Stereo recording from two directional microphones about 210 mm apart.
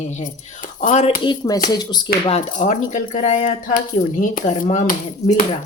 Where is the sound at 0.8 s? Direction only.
35° left (ahead or behind).